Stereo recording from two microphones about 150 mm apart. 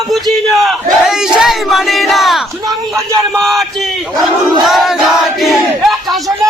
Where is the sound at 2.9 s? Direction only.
Centre (ahead or behind).